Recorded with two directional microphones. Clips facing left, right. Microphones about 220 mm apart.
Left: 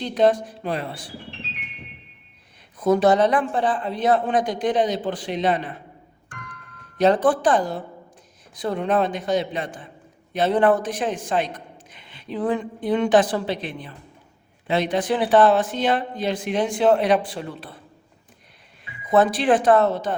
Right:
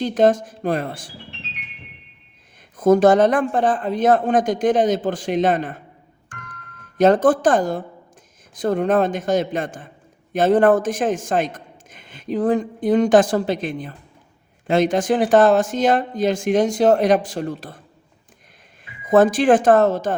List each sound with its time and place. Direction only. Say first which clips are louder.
0.0 s a man's voice: right 3 dB; 45° right (ahead or behind)
2.7 s a man's voice: right 4 dB; 45° right (ahead or behind)
7.0 s a man's voice: right 3 dB; 45° right (ahead or behind)
19.0 s a man's voice: right 4 dB; 45° right (ahead or behind)